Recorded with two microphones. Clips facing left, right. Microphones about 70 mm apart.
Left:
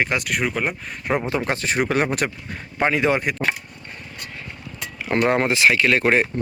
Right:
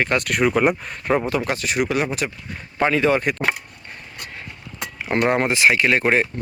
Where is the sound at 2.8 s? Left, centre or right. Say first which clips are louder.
Right 1 dB; centre.